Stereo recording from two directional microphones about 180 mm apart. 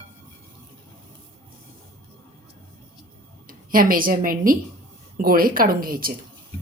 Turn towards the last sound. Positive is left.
turn(degrees=-55)  # may be behind; listen again after turning